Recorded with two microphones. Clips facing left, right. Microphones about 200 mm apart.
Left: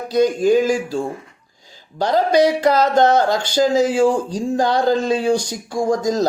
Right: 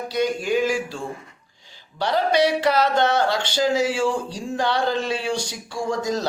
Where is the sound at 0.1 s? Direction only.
40° left (ahead or behind).